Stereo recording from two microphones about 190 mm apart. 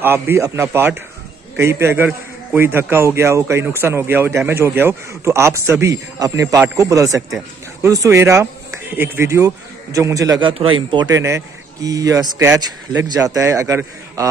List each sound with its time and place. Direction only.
0.0 s speech: 10° right (ahead or behind)
10.5 s speech: 30° right (ahead or behind)